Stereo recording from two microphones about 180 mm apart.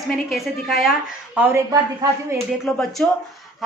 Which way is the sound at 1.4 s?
15° right (ahead or behind).